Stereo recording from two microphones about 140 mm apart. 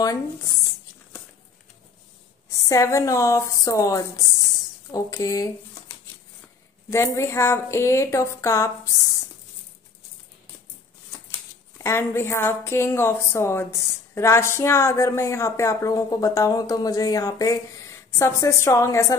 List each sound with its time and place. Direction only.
0.0 s a woman's voice: 25° left (ahead or behind)
2.5 s a woman's voice: 20° left (ahead or behind)
11.8 s a woman's voice: 15° left (ahead or behind)